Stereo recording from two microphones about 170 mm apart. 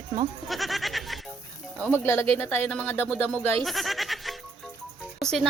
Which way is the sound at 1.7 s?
10° left (ahead or behind).